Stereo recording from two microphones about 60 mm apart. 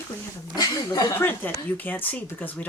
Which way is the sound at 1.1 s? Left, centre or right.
Left.